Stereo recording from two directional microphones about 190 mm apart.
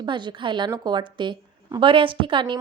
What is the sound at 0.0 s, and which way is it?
A woman's voice, 25° right (ahead or behind).